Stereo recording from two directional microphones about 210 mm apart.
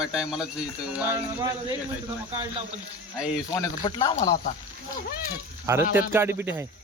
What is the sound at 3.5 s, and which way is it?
Speech, 15° left (ahead or behind).